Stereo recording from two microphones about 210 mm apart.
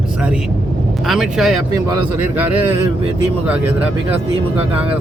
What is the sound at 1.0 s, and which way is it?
Speech, centre (ahead or behind).